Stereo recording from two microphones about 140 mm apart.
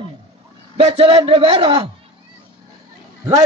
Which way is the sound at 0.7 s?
45° right (ahead or behind).